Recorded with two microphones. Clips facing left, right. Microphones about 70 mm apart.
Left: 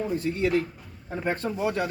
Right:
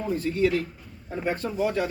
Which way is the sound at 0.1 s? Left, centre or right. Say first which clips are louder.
Right 3 dB; left.